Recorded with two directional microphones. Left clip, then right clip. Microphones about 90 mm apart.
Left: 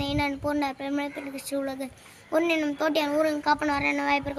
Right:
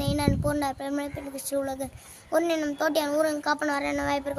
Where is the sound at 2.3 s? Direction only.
40° right (ahead or behind).